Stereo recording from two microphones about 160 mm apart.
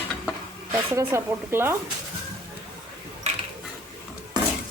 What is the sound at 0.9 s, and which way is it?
Speech, 15° right (ahead or behind).